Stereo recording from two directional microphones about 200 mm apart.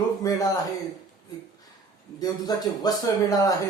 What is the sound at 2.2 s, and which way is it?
Speech, 20° left (ahead or behind).